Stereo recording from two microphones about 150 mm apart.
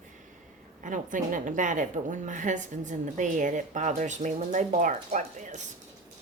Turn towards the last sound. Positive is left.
turn(degrees=-55)  # may be behind; listen again after turning